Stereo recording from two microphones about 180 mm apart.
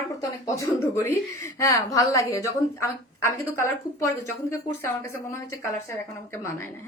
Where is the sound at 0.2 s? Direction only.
15° left (ahead or behind).